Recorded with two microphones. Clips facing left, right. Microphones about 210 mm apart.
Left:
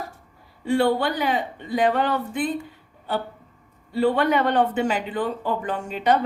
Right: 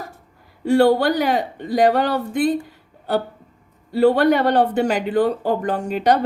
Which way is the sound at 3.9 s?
40° right (ahead or behind).